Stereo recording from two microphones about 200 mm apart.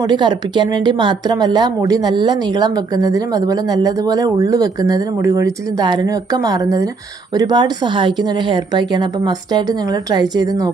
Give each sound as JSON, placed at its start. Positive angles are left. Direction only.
{"t": 0.0, "sound": "speech", "side_deg": -20}